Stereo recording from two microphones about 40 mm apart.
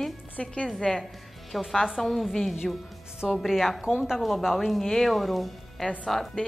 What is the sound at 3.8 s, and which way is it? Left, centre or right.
Speech, centre.